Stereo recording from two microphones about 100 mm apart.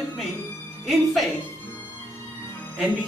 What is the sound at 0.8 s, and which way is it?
Speech, centre (ahead or behind).